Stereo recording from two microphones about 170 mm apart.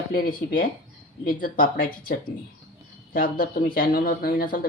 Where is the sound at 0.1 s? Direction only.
60° left (ahead or behind).